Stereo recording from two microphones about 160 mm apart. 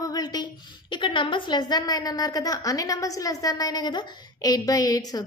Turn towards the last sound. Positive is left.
turn(degrees=25)  # may be behind; listen again after turning